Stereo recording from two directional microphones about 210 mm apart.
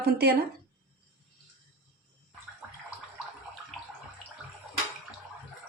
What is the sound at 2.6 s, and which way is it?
Bathtub, 5° right (ahead or behind).